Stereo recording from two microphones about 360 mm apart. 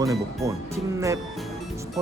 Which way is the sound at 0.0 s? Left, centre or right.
Centre.